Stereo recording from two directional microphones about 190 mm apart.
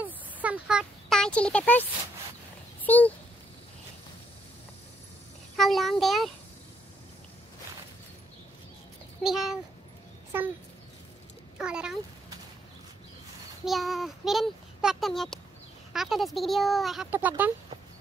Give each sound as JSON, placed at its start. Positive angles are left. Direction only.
{"t": 0.0, "sound": "a sound", "side_deg": -5}
{"t": 2.8, "sound": "speech", "side_deg": 10}
{"t": 5.6, "sound": "speech", "side_deg": 0}
{"t": 9.2, "sound": "a child's voice", "side_deg": 0}
{"t": 11.5, "sound": "a sound", "side_deg": -5}
{"t": 13.7, "sound": "a child's voice", "side_deg": 0}